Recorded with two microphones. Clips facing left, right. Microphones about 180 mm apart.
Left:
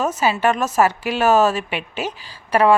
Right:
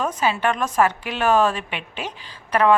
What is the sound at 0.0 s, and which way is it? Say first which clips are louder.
A woman's voice: left 3 dB; 5° left (ahead or behind).